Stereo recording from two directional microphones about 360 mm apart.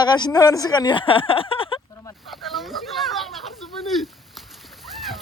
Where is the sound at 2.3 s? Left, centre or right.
Centre.